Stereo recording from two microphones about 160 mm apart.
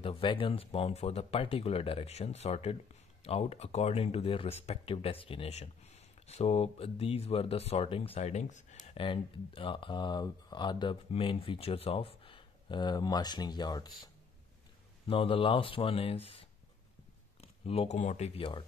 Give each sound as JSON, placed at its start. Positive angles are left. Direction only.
{"t": 0.0, "sound": "speech", "side_deg": 35}
{"t": 8.9, "sound": "speech", "side_deg": 35}
{"t": 15.0, "sound": "speech", "side_deg": 35}